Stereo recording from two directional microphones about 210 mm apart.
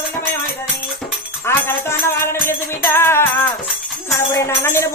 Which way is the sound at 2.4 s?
10° left (ahead or behind).